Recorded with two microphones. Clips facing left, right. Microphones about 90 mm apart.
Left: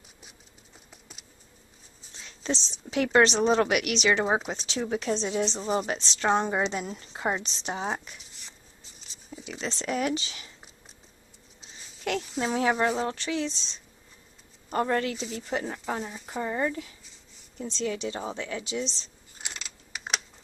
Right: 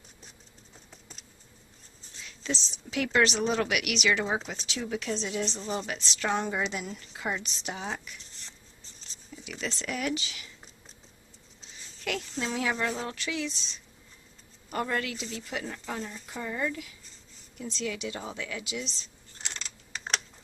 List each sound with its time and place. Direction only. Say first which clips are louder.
2.2 s a woman's voice: left 3 dB; 30° left (ahead or behind)
8.2 s a sound: even; 5° left (ahead or behind)
9.3 s speech: left 2 dB; 30° left (ahead or behind)
12.1 s a woman's voice: left 4 dB; 35° left (ahead or behind)
16.0 s speech: left 2 dB; 5° left (ahead or behind)
16.3 s a woman's voice: left 4 dB; 35° left (ahead or behind)
19.3 s a sound: even; 10° left (ahead or behind)